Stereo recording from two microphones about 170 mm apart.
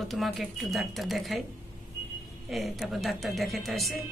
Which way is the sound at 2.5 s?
Centre (ahead or behind).